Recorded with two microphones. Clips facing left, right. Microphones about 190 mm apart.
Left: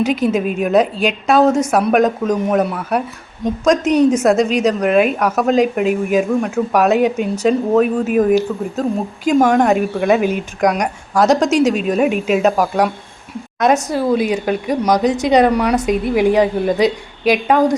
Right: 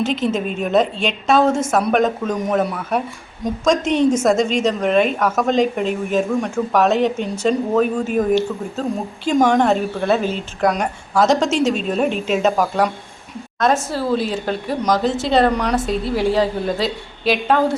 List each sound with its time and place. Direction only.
0.0 s speech: 10° left (ahead or behind)